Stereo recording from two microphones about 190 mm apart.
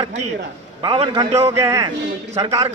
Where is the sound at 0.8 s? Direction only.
25° right (ahead or behind).